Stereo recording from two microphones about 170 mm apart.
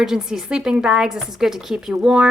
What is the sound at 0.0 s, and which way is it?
A woman's voice, 5° right (ahead or behind).